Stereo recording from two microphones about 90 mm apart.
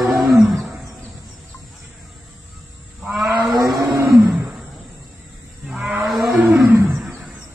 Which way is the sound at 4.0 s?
25° right (ahead or behind).